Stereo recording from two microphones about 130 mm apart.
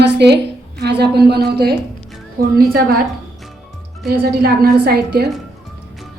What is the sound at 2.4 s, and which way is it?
Speech, 90° right.